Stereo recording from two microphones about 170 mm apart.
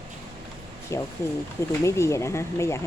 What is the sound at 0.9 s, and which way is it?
A woman's voice, 15° left (ahead or behind).